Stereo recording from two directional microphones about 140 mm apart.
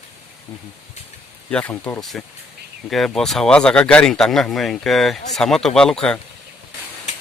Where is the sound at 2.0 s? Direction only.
Centre (ahead or behind).